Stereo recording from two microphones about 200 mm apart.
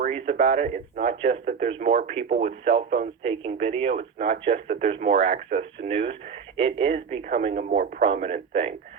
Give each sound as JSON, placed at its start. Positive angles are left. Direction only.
{"t": 0.0, "sound": "speech", "side_deg": -35}